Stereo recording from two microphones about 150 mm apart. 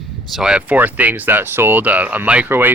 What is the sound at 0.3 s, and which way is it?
Speech, 5° right (ahead or behind).